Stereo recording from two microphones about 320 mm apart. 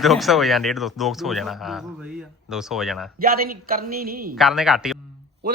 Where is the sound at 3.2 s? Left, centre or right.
Right.